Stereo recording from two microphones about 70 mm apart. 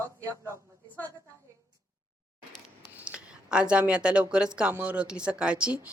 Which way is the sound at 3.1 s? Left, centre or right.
Centre.